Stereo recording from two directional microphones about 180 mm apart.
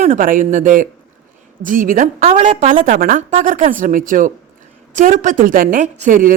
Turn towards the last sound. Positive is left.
turn(degrees=-50)  # may be behind; listen again after turning